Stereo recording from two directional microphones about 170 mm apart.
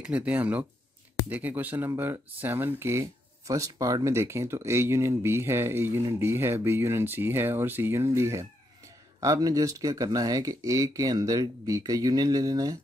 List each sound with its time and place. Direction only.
0.0 s speech: 10° right (ahead or behind)